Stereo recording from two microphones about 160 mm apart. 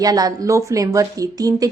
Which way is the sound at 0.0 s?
20° right (ahead or behind).